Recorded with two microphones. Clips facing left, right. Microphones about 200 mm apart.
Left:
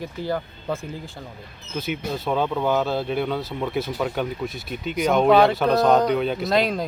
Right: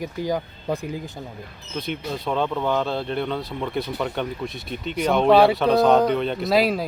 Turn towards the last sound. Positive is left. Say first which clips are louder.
# right 1 dB
turn(degrees=-5)  # may be behind; listen again after turning